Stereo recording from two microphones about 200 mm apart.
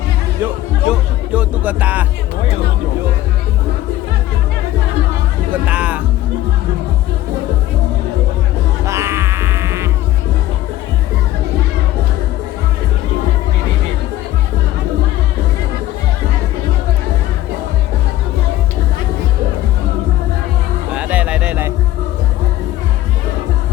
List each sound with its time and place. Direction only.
0.9 s speech: 5° right (ahead or behind)
5.6 s music: 5° right (ahead or behind)
8.9 s music: 15° right (ahead or behind)
20.9 s music: 5° right (ahead or behind)